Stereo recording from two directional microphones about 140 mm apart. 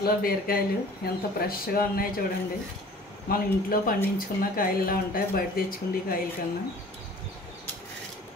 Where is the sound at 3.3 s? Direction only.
90° left.